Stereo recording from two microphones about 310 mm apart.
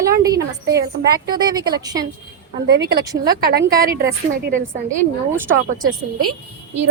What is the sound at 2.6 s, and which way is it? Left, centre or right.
Speech, right.